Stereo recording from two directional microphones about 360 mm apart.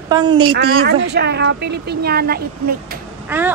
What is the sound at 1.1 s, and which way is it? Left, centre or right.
A woman's voice, right.